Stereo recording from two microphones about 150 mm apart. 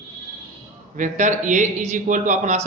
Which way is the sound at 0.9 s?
60° right (ahead or behind).